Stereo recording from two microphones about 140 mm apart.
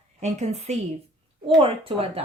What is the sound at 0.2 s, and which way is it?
Speech, 55° right (ahead or behind).